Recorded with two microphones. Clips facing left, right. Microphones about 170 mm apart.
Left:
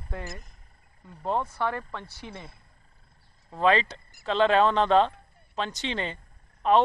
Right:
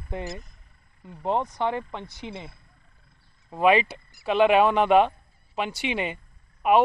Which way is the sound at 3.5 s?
15° right (ahead or behind).